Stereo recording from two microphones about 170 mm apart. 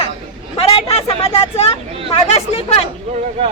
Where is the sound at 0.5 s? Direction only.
35° left (ahead or behind).